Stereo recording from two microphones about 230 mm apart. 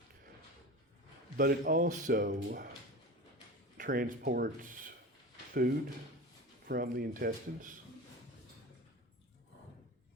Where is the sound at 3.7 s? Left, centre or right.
Right.